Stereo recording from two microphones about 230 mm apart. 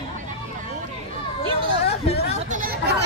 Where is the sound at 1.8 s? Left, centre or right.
Left.